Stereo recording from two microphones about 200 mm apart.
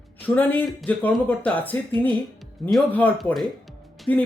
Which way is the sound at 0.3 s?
10° left (ahead or behind).